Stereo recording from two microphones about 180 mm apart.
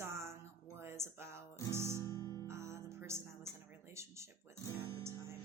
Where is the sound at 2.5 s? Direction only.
15° right (ahead or behind).